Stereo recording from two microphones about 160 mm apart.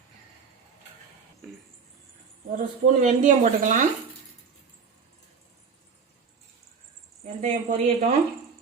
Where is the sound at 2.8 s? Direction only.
50° right (ahead or behind).